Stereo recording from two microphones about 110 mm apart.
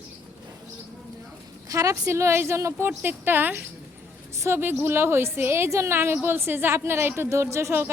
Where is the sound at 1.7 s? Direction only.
30° right (ahead or behind).